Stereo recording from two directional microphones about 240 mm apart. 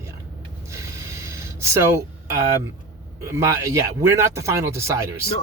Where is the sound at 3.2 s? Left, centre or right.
Centre.